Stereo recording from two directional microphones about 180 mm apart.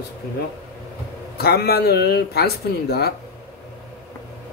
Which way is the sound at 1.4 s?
60° left (ahead or behind).